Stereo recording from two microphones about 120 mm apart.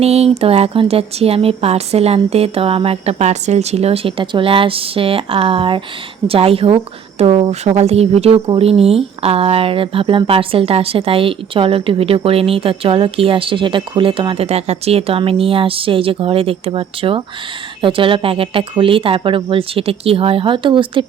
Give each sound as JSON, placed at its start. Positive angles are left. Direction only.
{"t": 0.0, "sound": "speech", "side_deg": -60}